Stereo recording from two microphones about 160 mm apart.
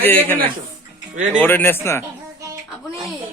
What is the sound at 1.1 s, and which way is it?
Speech, 45° right (ahead or behind).